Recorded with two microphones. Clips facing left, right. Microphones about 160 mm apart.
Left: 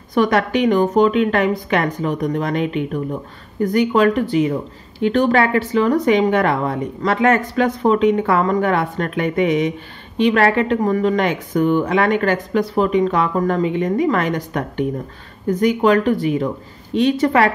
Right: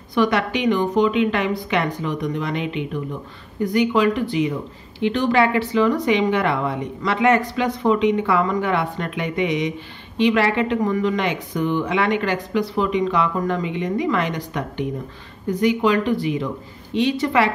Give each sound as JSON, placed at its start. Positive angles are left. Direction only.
{"t": 0.1, "sound": "speech", "side_deg": 45}